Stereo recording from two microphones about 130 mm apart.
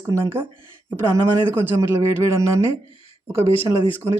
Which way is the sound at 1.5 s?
15° right (ahead or behind).